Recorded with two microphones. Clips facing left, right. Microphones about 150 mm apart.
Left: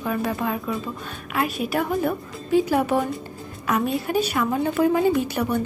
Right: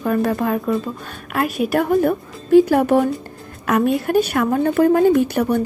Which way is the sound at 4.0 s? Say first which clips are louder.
Right 5 dB; 55° right (ahead or behind).